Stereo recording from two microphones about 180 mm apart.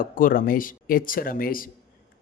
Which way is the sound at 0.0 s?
50° left (ahead or behind).